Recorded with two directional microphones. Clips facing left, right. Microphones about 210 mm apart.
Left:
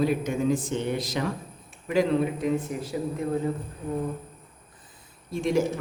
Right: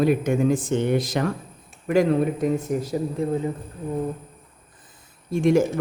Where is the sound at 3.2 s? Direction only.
25° right (ahead or behind).